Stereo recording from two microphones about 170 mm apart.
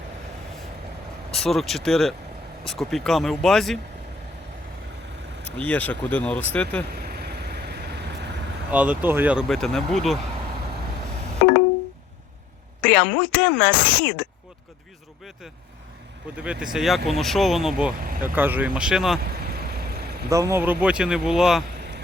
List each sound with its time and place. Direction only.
1.3 s speech: centre (ahead or behind)
5.5 s a woman's voice: 10° left (ahead or behind)
7.1 s vehicle: 70° right (ahead or behind)
8.7 s speech: 10° right (ahead or behind)
12.8 s a woman's voice: 10° left (ahead or behind)
16.4 s speech: 5° right (ahead or behind)
19.5 s vehicle: 65° right (ahead or behind)
20.3 s speech: 15° right (ahead or behind)